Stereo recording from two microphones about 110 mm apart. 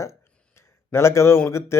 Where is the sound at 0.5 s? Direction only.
25° left (ahead or behind).